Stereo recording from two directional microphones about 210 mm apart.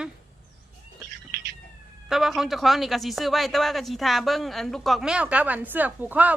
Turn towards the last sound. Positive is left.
turn(degrees=-5)  # may be behind; listen again after turning